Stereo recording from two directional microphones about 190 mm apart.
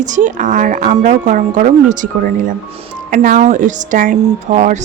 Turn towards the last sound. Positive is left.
turn(degrees=-40)  # may be behind; listen again after turning